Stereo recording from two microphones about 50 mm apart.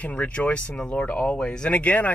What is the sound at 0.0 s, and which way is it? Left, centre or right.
Speech, left.